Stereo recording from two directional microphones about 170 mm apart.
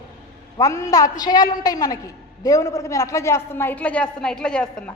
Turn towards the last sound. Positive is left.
turn(degrees=5)  # may be behind; listen again after turning